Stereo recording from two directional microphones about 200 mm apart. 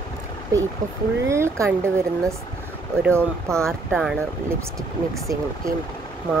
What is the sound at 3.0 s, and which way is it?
Speech, 10° right (ahead or behind).